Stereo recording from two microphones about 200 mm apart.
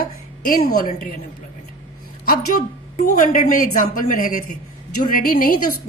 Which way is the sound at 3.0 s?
40° left (ahead or behind).